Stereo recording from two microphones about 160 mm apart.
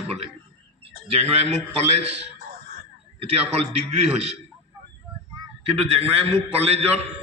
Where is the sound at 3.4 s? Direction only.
40° right (ahead or behind).